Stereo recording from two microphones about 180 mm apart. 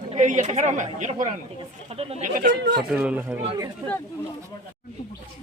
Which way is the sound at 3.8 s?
25° right (ahead or behind).